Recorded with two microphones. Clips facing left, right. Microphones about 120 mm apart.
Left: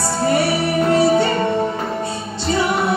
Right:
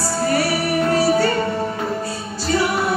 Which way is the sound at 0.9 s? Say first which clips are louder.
Left 3 dB; 25° left (ahead or behind).